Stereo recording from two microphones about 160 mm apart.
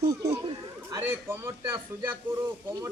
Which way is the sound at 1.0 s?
15° right (ahead or behind).